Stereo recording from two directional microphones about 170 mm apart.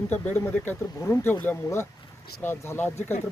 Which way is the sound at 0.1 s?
15° left (ahead or behind).